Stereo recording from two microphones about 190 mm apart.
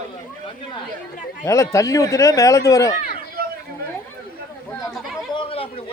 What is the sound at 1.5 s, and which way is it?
Speech, 15° left (ahead or behind).